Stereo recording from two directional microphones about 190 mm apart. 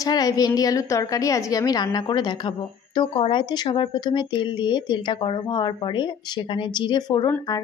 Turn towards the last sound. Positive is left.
turn(degrees=20)  # may be behind; listen again after turning